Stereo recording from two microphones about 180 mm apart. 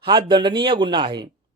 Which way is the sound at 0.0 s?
25° right (ahead or behind).